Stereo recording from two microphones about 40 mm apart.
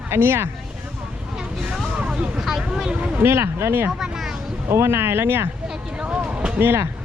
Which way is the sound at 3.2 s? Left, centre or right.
Right.